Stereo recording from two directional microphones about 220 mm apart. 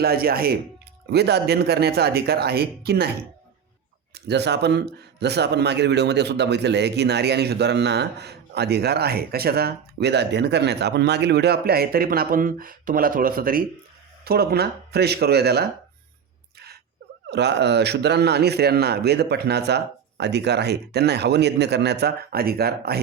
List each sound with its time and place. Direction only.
0.0 s speech: 45° right (ahead or behind)
4.1 s speech: 50° right (ahead or behind)
17.3 s speech: 50° right (ahead or behind)